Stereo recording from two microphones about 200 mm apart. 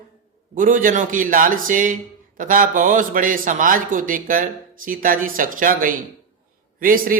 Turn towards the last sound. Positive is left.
turn(degrees=-45)  # may be behind; listen again after turning